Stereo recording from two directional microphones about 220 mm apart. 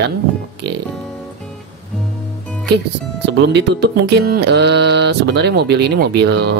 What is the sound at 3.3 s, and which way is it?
Speech, 50° right (ahead or behind).